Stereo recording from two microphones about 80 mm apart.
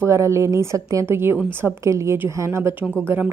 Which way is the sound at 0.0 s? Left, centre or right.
Right.